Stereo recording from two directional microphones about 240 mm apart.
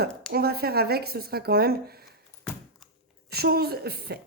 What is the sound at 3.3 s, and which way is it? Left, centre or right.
Speech, right.